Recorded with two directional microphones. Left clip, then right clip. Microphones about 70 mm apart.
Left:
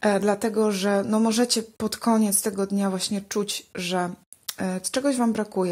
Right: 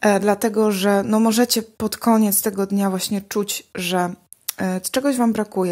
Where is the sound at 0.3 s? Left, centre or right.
Right.